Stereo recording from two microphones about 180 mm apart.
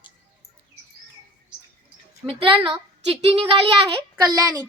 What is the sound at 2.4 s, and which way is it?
A woman's voice, 30° right (ahead or behind).